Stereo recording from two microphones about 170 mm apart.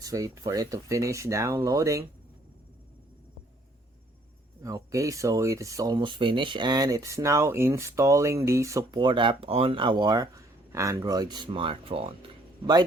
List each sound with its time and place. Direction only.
0.0 s speech: 20° right (ahead or behind)
4.6 s speech: 20° right (ahead or behind)